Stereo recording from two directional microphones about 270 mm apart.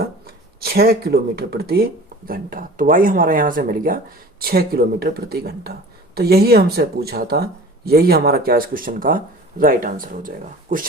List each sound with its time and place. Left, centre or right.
0.6 s speech: right